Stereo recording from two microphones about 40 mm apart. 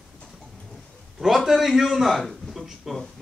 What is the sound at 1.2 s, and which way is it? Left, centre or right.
Speech, centre.